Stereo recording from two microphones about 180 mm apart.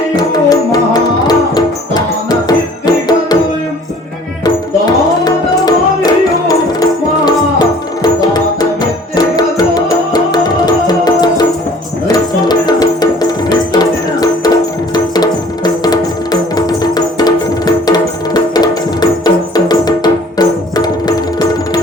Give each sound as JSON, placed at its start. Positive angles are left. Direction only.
{"t": 0.2, "sound": "music", "side_deg": 20}
{"t": 5.2, "sound": "music", "side_deg": 20}